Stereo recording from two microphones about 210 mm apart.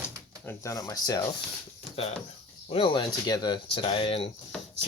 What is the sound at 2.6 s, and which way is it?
Speech, 25° left (ahead or behind).